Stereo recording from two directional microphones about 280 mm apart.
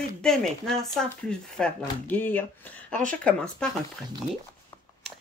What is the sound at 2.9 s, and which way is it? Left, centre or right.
Speech, right.